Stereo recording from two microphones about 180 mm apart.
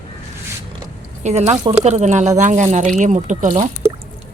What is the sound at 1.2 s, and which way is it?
Speech, 40° right (ahead or behind).